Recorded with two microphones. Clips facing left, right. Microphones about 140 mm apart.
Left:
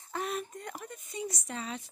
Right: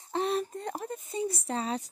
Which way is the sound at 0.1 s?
30° right (ahead or behind).